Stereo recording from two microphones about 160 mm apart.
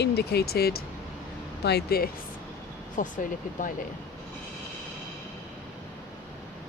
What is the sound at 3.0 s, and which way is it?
Speech, 60° left (ahead or behind).